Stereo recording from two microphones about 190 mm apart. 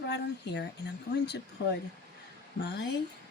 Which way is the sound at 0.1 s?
60° left (ahead or behind).